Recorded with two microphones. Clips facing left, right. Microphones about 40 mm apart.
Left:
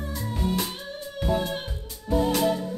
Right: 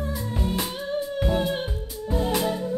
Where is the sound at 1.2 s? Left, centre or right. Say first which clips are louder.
Left 1 dB; centre.